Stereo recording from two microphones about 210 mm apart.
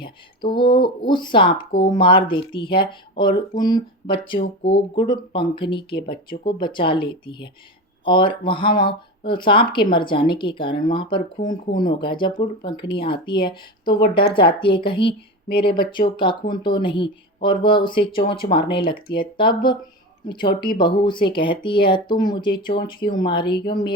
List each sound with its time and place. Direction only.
0.0 s speech: 20° left (ahead or behind)
11.3 s speech: 40° left (ahead or behind)
11.8 s speech: 20° left (ahead or behind)